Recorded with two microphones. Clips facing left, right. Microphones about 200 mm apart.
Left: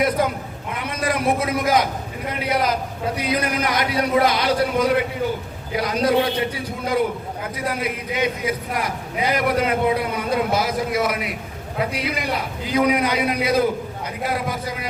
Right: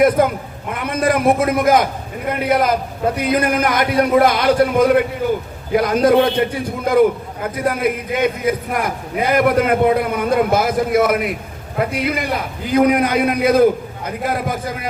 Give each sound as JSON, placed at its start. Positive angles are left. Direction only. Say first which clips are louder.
{"t": 0.2, "sound": "a man's voice", "louder": "right 6 dB", "side_deg": -50}